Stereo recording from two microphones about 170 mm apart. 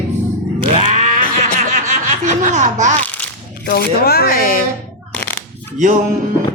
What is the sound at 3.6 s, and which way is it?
Speech, 65° left (ahead or behind).